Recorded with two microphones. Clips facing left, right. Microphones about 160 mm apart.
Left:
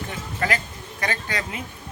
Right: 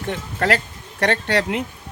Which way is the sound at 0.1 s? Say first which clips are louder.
Right 6 dB; 70° right (ahead or behind).